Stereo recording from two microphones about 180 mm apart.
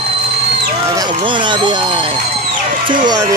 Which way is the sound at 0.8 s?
20° right (ahead or behind).